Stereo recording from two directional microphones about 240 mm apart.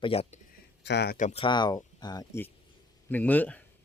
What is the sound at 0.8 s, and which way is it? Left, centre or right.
Speech, left.